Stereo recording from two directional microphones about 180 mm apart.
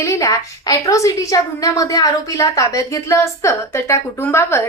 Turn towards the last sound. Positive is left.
turn(degrees=15)  # may be behind; listen again after turning